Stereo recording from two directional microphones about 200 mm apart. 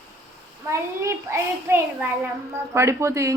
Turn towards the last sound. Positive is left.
turn(degrees=-15)  # may be behind; listen again after turning